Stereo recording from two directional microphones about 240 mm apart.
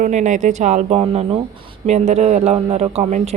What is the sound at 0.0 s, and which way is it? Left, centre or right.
A woman's voice, right.